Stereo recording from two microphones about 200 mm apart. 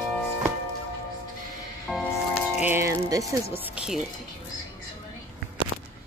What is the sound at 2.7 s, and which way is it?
Speech, 15° right (ahead or behind).